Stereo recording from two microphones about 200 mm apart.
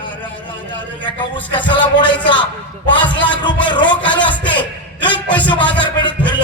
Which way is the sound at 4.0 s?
25° left (ahead or behind).